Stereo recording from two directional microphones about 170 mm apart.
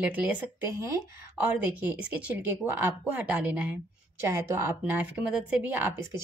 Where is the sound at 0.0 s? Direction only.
10° right (ahead or behind).